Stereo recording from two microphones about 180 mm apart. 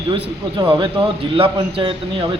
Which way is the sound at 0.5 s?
25° right (ahead or behind).